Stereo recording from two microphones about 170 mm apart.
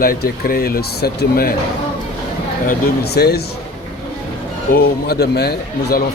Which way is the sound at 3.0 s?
70° left (ahead or behind).